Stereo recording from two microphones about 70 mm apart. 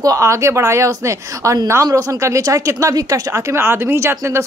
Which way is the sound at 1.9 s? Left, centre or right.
Right.